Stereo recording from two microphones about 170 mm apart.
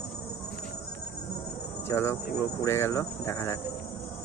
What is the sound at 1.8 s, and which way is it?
Speech, 15° left (ahead or behind).